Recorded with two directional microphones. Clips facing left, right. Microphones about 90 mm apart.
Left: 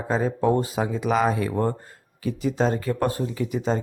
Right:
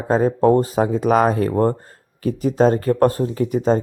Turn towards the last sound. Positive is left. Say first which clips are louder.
# right 7 dB
turn(degrees=-45)  # may be behind; listen again after turning